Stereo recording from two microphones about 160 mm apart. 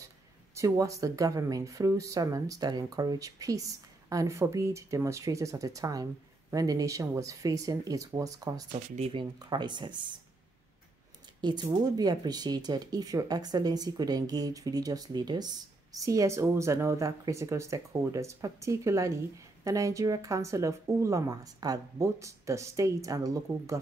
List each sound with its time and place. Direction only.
0.6 s speech: 20° right (ahead or behind)
8.7 s speech: 40° right (ahead or behind)
9.4 s speech: 25° right (ahead or behind)
11.4 s speech: 30° right (ahead or behind)